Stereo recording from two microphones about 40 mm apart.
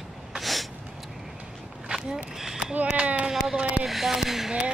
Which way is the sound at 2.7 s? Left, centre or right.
Right.